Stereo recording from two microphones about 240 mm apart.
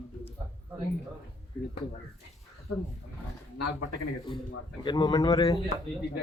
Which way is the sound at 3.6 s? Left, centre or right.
Left.